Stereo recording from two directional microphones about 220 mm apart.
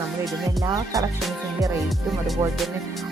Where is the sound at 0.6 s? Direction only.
15° right (ahead or behind).